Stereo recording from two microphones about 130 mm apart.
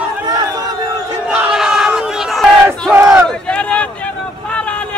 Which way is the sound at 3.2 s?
10° left (ahead or behind).